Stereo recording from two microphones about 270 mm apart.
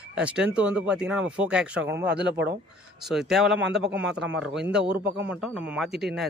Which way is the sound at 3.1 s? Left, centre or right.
Centre.